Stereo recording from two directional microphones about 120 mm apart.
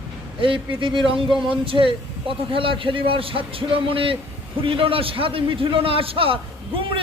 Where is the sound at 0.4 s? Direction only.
45° right (ahead or behind).